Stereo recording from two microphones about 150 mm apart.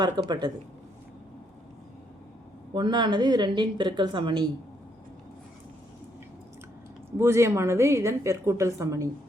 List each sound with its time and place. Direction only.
0.0 s a woman's voice: 30° right (ahead or behind)
2.7 s a woman's voice: 30° right (ahead or behind)
7.2 s a woman's voice: 15° right (ahead or behind)